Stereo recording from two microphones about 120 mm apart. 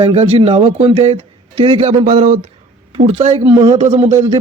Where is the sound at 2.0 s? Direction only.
90° right.